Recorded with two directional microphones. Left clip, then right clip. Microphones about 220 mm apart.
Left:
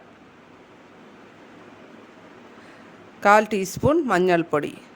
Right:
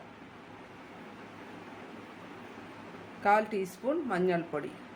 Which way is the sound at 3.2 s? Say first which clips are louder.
Left 10 dB; 50° left (ahead or behind).